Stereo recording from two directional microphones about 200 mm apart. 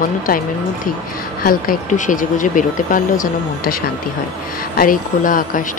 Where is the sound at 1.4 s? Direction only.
45° left (ahead or behind).